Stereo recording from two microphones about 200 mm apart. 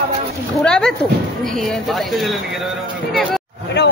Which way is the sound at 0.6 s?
5° left (ahead or behind).